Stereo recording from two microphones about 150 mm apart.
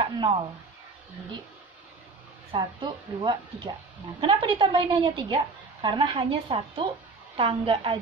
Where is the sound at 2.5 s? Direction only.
30° right (ahead or behind).